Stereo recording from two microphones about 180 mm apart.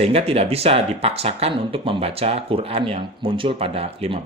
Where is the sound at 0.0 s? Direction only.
35° right (ahead or behind).